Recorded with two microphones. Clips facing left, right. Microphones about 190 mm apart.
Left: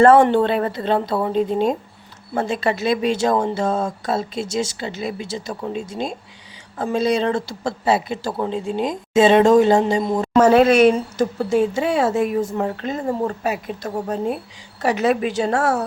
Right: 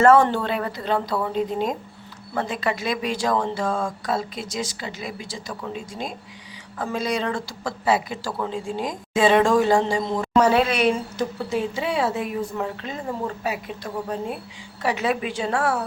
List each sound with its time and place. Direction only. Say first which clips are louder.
0.0 s speech: left 4 dB; 25° left (ahead or behind)
9.9 s a woman's voice: left 4 dB; 10° left (ahead or behind)
10.3 s speech: left 6 dB; 45° left (ahead or behind)